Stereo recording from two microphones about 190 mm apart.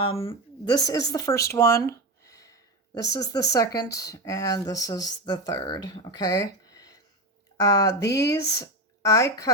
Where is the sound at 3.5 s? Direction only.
20° left (ahead or behind).